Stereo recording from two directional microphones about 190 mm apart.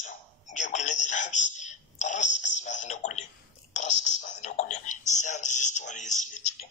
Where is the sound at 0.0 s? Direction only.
40° left (ahead or behind).